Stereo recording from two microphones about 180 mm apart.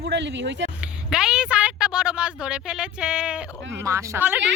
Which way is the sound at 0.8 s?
5° right (ahead or behind).